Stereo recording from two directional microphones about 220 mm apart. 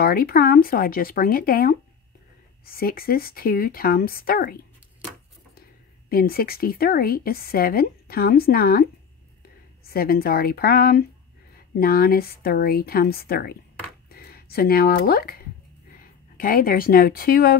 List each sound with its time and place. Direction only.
0.0 s speech: 40° left (ahead or behind)
6.0 s speech: 40° left (ahead or behind)
9.8 s speech: 45° left (ahead or behind)